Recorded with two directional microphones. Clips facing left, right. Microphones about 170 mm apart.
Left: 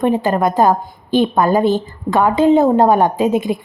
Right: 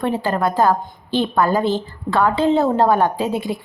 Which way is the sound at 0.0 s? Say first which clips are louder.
Left 5 dB; 20° left (ahead or behind).